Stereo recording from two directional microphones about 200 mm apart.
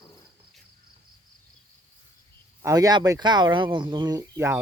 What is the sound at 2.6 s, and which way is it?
Speech, 15° right (ahead or behind).